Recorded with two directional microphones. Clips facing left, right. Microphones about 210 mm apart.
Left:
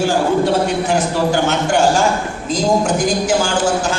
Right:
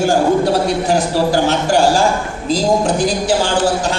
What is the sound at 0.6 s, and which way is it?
A man's voice, 35° right (ahead or behind).